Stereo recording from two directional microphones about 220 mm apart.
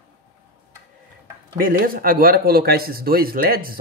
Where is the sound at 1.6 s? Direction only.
40° right (ahead or behind).